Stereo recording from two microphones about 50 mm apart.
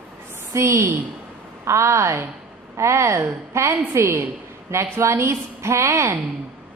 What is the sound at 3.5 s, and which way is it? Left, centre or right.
A woman's voice, right.